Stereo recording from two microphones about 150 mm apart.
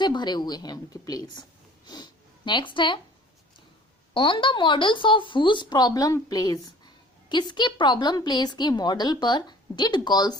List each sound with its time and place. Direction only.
0.0 s a woman's voice: 30° left (ahead or behind)
4.1 s a woman's voice: 35° left (ahead or behind)